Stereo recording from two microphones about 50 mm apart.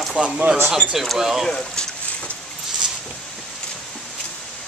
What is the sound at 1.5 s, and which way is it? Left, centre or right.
Speech, centre.